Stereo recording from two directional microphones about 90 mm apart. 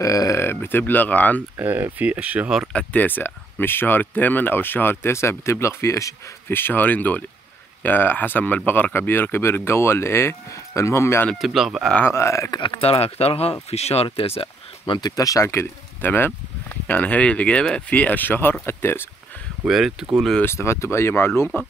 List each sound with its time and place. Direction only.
0.0 s speech: 35° left (ahead or behind); by 1.4 s 20° left (ahead or behind)
1.6 s speech: 20° right (ahead or behind)
2.7 s speech: 15° left (ahead or behind); by 6.6 s 35° left (ahead or behind)
6.6 s speech: 20° left (ahead or behind)
11.4 s speech: 5° right (ahead or behind)
12.1 s speech: 30° left (ahead or behind)
12.5 s speech: 80° left
15.0 s speech: 45° left (ahead or behind); by 19.0 s 25° left (ahead or behind)
19.7 s speech: 5° right (ahead or behind)
20.4 s speech: 30° left (ahead or behind)